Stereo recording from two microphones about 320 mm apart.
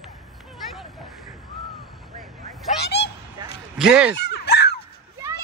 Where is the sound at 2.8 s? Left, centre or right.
Left.